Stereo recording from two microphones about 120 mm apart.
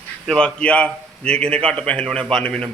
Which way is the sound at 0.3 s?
5° left (ahead or behind).